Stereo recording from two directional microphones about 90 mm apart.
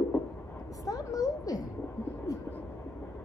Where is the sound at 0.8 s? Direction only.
40° left (ahead or behind).